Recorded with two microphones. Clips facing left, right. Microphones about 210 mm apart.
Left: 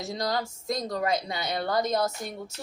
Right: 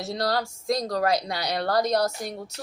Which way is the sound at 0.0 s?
Centre (ahead or behind).